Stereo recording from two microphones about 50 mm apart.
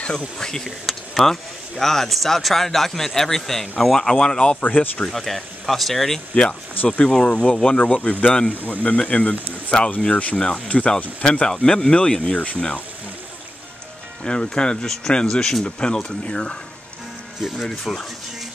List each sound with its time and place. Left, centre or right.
0.4 s speech: centre; by 5.1 s left
5.1 s speech: centre
6.9 s speech: centre
14.2 s speech: centre
17.5 s speech: centre